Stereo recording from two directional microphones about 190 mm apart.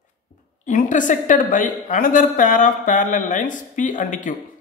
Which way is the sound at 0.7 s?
40° left (ahead or behind).